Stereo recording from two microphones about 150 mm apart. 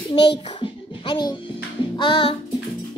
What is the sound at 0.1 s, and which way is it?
A child's voice, 35° left (ahead or behind).